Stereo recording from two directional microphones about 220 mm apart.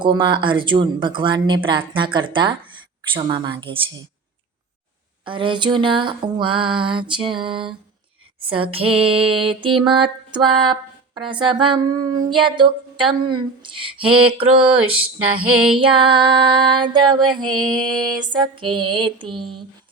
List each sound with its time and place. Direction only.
0.0 s speech: 20° right (ahead or behind)
5.2 s speech: 20° right (ahead or behind)
17.7 s female singing: centre (ahead or behind)
18.2 s speech: 20° right (ahead or behind)